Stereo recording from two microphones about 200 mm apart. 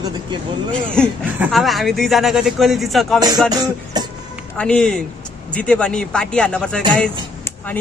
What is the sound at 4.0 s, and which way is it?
Music, 20° right (ahead or behind).